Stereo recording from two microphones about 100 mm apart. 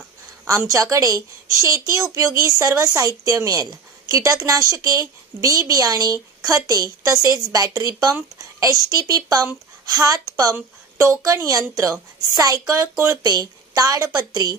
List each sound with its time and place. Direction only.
0.6 s a woman's voice: 30° right (ahead or behind)
13.2 s a woman's voice: 40° right (ahead or behind)